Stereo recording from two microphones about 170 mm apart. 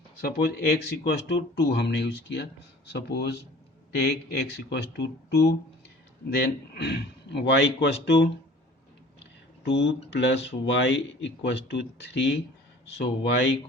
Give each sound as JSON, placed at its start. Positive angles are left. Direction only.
{"t": 0.2, "sound": "speech", "side_deg": 65}
{"t": 4.4, "sound": "speech", "side_deg": 90}
{"t": 9.6, "sound": "speech", "side_deg": 90}